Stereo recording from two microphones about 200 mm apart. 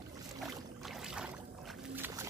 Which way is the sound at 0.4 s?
Centre (ahead or behind).